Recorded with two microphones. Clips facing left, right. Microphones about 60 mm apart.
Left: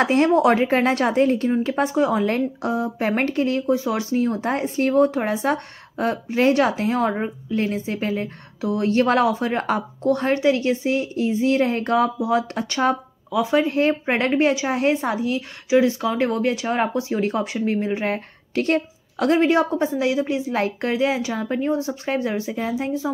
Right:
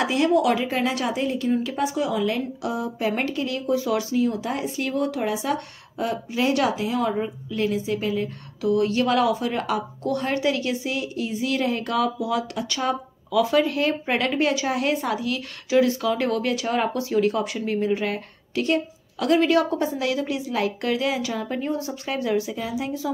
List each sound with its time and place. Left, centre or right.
0.0 s speech: left